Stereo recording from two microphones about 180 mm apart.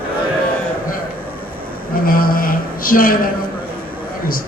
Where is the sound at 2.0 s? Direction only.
55° left (ahead or behind).